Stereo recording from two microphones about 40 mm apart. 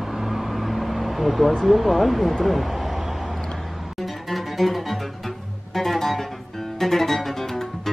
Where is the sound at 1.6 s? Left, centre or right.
Centre.